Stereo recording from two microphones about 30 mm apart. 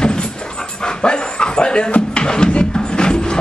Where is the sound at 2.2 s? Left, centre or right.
Left.